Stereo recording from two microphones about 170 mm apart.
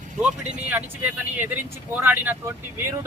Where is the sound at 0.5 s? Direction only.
10° right (ahead or behind).